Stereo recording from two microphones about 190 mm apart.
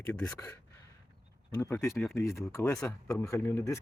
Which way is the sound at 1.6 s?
15° left (ahead or behind).